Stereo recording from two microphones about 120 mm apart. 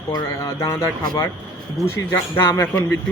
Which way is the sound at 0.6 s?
20° left (ahead or behind).